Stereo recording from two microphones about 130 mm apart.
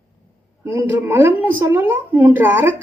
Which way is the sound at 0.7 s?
20° right (ahead or behind).